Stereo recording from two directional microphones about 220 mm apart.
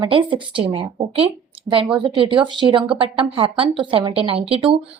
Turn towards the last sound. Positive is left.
turn(degrees=-25)  # may be behind; listen again after turning